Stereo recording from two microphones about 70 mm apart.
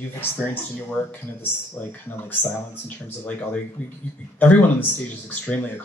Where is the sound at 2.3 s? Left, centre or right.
Left.